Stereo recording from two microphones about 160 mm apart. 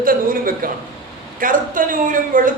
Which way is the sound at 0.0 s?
65° right (ahead or behind).